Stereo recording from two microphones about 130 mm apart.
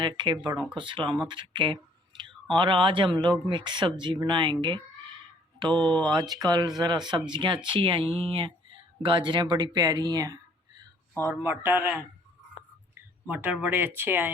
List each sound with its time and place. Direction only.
0.0 s speech: 40° right (ahead or behind)
5.7 s speech: 10° left (ahead or behind)
6.0 s speech: 35° right (ahead or behind); by 14.3 s 15° right (ahead or behind)